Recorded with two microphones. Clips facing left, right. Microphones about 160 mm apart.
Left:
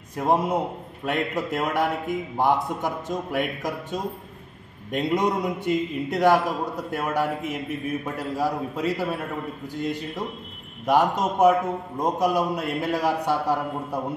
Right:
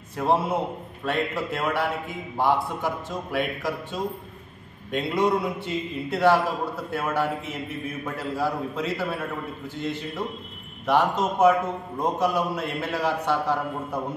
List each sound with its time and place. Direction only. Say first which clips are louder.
0.1 s a man's voice: left 1 dB; 15° left (ahead or behind)